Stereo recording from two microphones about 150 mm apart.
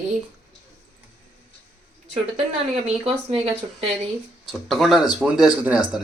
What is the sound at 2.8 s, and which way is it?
Speech, 40° right (ahead or behind).